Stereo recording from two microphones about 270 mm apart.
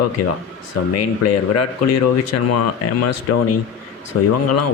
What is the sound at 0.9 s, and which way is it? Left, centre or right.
Speech, left.